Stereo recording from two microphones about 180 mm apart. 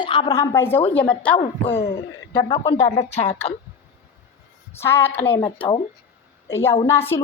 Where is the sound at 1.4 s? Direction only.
35° left (ahead or behind).